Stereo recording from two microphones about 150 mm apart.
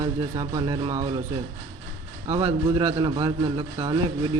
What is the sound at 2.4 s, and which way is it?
A man's voice, 45° right (ahead or behind).